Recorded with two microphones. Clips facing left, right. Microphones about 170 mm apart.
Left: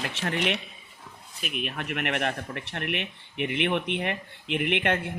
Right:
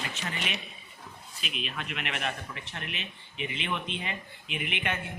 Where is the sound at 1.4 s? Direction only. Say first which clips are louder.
Left 5 dB; 55° left (ahead or behind).